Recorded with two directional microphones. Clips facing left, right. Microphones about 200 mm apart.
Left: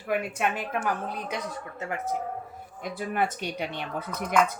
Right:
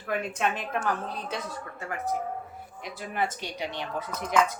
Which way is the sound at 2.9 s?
55° left (ahead or behind).